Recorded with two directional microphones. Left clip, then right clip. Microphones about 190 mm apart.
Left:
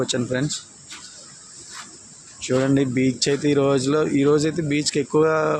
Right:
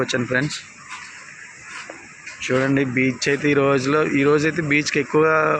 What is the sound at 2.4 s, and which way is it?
Speech, 15° left (ahead or behind).